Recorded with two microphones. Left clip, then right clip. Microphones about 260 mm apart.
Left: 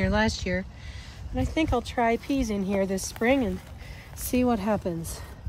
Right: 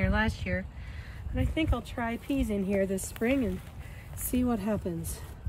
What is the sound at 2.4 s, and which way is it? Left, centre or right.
Speech, centre.